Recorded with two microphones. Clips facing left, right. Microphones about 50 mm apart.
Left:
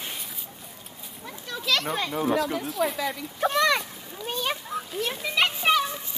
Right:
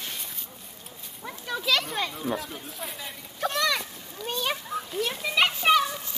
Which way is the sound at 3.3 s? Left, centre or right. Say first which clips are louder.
Left 4 dB; centre.